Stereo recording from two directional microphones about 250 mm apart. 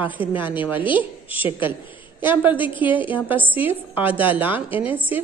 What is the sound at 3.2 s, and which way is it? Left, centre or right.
A woman's voice, centre.